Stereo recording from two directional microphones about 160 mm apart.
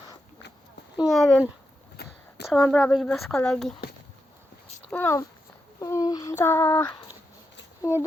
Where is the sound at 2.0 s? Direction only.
80° left.